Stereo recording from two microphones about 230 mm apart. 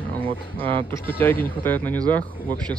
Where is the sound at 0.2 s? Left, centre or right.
Right.